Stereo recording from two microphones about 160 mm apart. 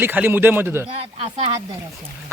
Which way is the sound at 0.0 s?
10° right (ahead or behind).